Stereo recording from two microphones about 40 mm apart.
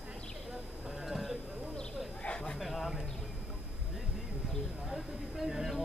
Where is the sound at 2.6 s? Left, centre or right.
Centre.